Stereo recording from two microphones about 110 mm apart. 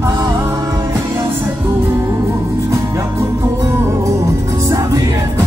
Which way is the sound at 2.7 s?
25° right (ahead or behind).